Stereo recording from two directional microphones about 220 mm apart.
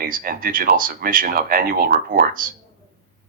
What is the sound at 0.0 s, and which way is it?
Speech, 40° right (ahead or behind).